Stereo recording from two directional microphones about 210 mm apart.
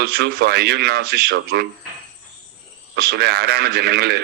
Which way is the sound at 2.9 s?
50° right (ahead or behind).